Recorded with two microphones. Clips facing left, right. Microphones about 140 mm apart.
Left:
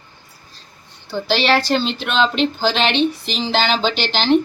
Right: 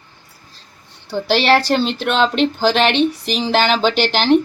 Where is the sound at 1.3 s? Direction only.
50° right (ahead or behind).